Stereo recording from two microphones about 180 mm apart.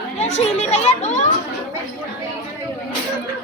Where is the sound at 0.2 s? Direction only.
35° left (ahead or behind).